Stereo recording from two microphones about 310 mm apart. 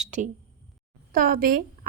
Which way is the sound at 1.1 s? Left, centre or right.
Right.